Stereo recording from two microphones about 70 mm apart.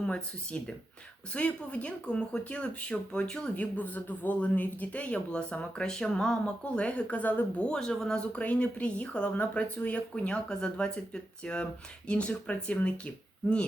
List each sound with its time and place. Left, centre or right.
0.0 s speech: centre